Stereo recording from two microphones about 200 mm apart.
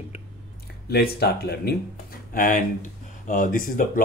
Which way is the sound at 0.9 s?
50° left (ahead or behind).